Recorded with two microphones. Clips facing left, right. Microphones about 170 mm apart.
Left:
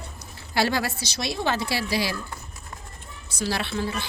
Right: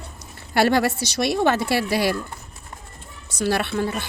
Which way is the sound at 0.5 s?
60° right (ahead or behind).